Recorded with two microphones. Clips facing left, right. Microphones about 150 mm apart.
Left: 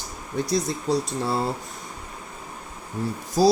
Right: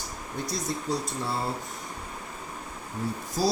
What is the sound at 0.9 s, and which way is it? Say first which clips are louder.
Speech: left 7 dB; 90° left.